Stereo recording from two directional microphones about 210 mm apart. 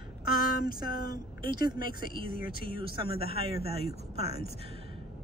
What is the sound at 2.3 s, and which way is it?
Speech, 45° left (ahead or behind).